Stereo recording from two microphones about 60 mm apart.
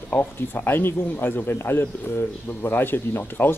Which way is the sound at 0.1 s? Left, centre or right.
Left.